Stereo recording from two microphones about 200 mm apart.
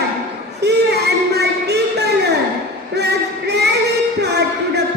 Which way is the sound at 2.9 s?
55° right (ahead or behind).